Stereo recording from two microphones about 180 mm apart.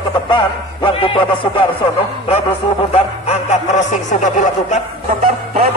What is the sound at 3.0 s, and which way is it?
Speech, 40° left (ahead or behind).